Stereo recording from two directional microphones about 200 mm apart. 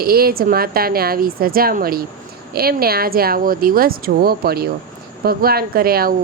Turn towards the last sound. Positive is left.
turn(degrees=-50)  # may be behind; listen again after turning